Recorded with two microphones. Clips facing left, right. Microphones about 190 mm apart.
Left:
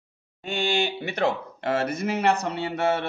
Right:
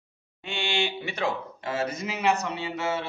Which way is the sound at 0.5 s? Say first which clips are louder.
Left 4 dB; 40° left (ahead or behind).